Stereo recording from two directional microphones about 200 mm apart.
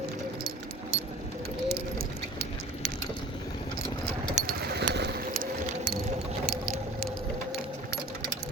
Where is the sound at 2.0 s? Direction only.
45° right (ahead or behind).